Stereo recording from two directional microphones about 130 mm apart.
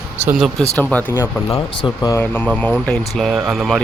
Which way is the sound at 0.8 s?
10° left (ahead or behind).